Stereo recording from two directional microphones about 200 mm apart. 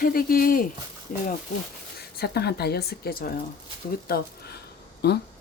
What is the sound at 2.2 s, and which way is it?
Speech, 55° left (ahead or behind).